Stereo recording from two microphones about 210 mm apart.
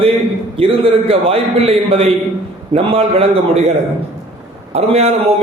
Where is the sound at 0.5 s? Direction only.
25° right (ahead or behind).